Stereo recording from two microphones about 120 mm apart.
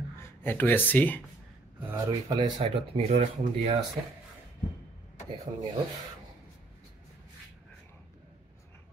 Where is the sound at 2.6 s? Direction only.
60° right (ahead or behind).